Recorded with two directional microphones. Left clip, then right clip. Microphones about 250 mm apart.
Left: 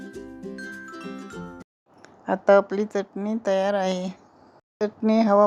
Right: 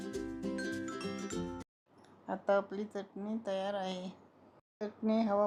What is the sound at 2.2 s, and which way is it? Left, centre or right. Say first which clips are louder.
Speech: left 14 dB; left.